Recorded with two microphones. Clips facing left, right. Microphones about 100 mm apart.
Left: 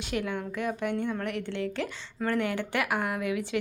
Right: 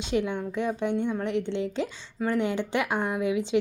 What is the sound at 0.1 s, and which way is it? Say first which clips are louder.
A woman's voice: right 4 dB; 20° right (ahead or behind).